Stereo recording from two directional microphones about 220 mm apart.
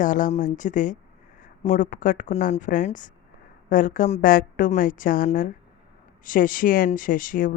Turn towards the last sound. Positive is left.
turn(degrees=40)  # may be behind; listen again after turning